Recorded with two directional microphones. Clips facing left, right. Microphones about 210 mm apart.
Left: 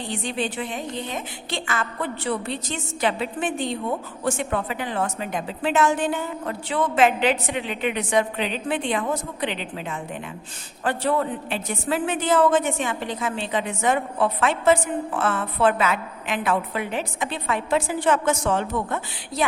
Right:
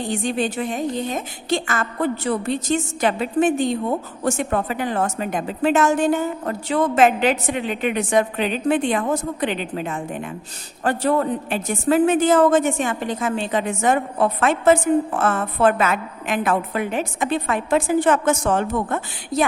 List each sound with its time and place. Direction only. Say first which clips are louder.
0.0 s a woman's voice: right 5 dB; 45° right (ahead or behind)